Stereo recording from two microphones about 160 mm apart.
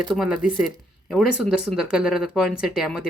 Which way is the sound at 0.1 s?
5° right (ahead or behind).